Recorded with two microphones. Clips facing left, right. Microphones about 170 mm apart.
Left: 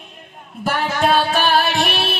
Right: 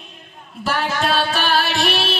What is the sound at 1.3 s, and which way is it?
Music, 50° left (ahead or behind).